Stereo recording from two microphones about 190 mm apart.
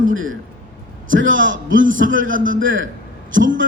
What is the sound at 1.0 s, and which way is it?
A man's voice, 90° right.